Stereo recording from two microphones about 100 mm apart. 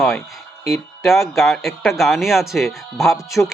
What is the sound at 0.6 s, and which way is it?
Speech, centre (ahead or behind).